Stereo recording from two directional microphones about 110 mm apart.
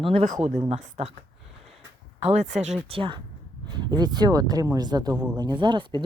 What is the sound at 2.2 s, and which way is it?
Speech, 75° right (ahead or behind).